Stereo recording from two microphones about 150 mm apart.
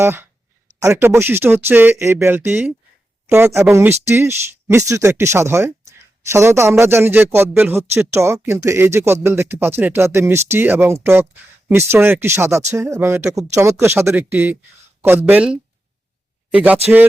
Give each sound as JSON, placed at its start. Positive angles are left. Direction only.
{"t": 0.0, "sound": "a man's voice", "side_deg": -15}